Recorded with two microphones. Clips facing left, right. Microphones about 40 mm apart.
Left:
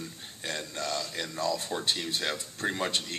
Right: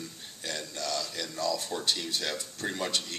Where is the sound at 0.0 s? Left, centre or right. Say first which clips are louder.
Left 1 dB; left.